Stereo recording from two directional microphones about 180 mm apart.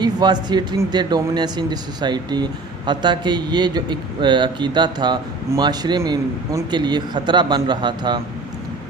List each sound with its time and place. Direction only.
0.0 s speech: 25° right (ahead or behind)